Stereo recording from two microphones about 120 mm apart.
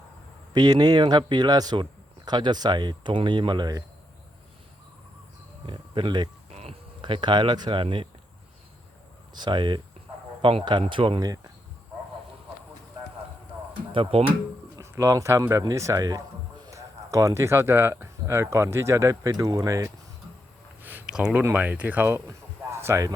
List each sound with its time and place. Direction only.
0.5 s speech: 35° right (ahead or behind)
5.6 s speech: 45° right (ahead or behind)
9.3 s speech: 40° right (ahead or behind)
13.9 s speech: 50° right (ahead or behind)
14.8 s speech: 25° right (ahead or behind)
20.8 s a sound: 10° right (ahead or behind)
21.4 s speech: 15° right (ahead or behind)